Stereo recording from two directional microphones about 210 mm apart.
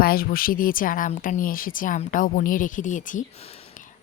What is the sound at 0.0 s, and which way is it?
A woman's voice, 45° left (ahead or behind).